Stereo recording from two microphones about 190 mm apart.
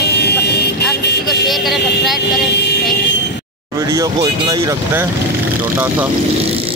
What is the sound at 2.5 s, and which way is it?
Vehicle, 60° left (ahead or behind).